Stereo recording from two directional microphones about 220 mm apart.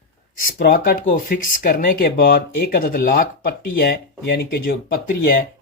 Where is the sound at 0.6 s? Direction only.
40° left (ahead or behind).